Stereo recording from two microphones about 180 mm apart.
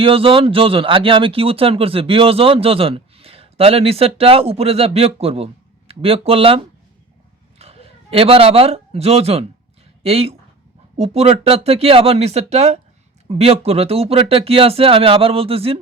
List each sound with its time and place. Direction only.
0.0 s speech: 30° right (ahead or behind)